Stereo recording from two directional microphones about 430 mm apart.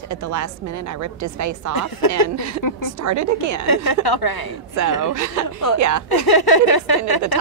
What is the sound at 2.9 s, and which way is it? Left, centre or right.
Speech, right.